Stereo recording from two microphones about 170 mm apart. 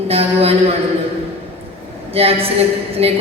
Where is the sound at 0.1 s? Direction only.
35° right (ahead or behind).